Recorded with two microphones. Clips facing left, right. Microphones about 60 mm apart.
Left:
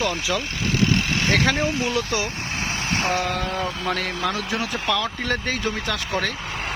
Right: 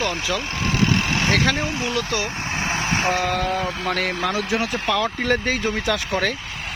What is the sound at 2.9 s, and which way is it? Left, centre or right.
Vehicle, centre.